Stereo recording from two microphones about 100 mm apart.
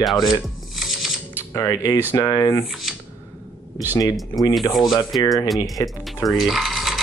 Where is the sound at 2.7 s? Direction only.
Centre (ahead or behind).